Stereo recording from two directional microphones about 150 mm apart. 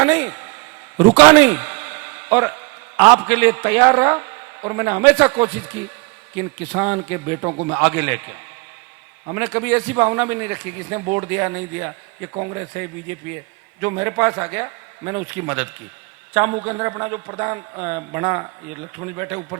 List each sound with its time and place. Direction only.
0.0 s a man's voice: 10° right (ahead or behind)